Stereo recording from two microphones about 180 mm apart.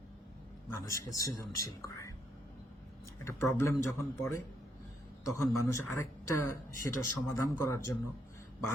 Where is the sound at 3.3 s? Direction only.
15° left (ahead or behind).